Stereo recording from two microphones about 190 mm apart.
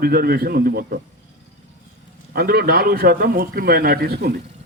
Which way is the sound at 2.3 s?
55° right (ahead or behind).